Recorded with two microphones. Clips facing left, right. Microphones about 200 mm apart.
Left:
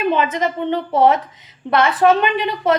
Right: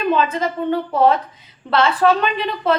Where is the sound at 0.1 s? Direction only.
20° left (ahead or behind).